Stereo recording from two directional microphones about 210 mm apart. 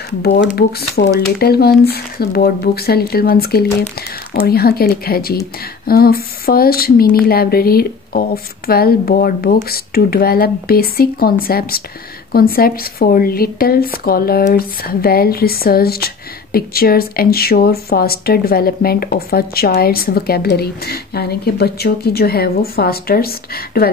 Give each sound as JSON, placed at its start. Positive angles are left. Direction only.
{"t": 0.6, "sound": "speech", "side_deg": 50}